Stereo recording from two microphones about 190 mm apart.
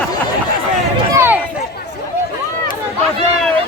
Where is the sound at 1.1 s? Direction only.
10° right (ahead or behind).